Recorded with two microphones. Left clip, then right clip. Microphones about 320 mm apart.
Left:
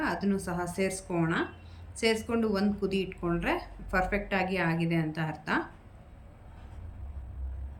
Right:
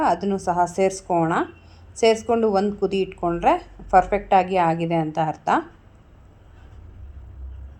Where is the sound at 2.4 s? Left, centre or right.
Right.